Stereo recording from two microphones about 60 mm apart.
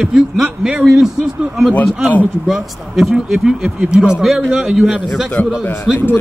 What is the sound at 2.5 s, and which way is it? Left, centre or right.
Speech, centre.